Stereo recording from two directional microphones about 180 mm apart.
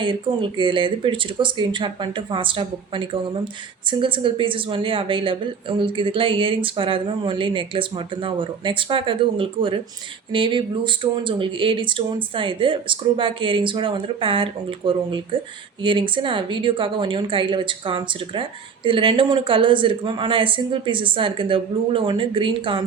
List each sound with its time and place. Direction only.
0.0 s a woman's voice: 30° right (ahead or behind)